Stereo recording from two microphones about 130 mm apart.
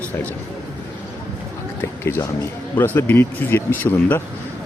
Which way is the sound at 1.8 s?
20° left (ahead or behind).